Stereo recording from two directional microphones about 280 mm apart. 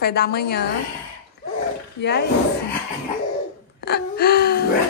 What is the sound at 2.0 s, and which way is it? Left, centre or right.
Speech, left.